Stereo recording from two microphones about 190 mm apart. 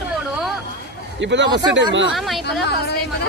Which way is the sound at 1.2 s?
70° right (ahead or behind).